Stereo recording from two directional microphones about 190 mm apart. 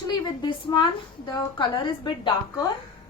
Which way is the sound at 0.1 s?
20° left (ahead or behind).